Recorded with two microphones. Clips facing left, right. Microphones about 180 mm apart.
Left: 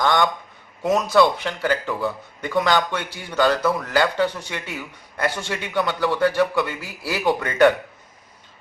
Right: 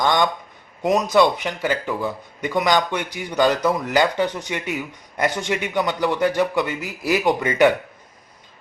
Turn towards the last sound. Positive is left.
turn(degrees=-15)  # may be behind; listen again after turning